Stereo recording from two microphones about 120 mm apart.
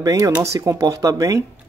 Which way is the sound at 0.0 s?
30° right (ahead or behind).